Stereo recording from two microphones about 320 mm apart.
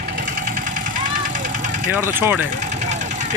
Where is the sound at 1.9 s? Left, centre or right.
Centre.